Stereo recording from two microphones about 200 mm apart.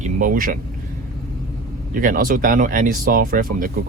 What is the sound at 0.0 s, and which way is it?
Speech, 45° right (ahead or behind).